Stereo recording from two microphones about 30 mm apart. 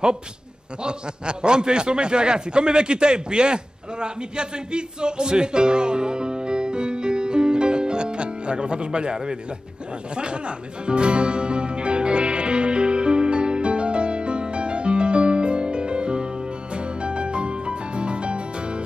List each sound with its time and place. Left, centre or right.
0.8 s a man's voice: right
10.9 s music: right